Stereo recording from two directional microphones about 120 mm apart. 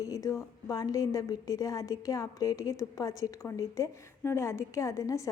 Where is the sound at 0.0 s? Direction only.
30° left (ahead or behind).